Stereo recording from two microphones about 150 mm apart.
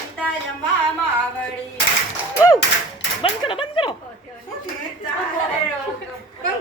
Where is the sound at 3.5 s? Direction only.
35° left (ahead or behind).